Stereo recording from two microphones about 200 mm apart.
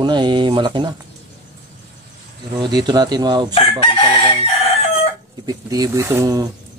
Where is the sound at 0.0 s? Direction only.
20° right (ahead or behind).